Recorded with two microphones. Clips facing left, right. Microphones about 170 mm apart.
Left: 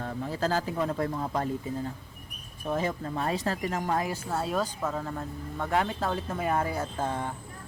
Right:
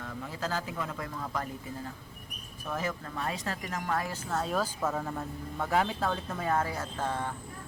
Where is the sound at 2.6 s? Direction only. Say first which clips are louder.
Left 5 dB; 30° left (ahead or behind).